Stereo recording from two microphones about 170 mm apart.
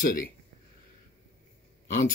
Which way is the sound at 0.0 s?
55° left (ahead or behind).